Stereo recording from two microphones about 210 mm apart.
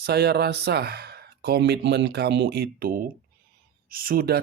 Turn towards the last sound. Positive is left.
turn(degrees=-45)  # may be behind; listen again after turning